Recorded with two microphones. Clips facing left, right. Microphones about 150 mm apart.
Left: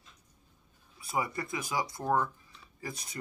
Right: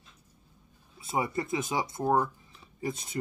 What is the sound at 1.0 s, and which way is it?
Speech, 25° right (ahead or behind).